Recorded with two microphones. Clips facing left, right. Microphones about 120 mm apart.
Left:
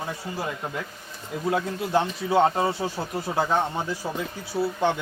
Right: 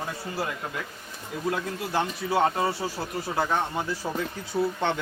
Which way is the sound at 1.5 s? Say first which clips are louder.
Left 5 dB; 20° left (ahead or behind).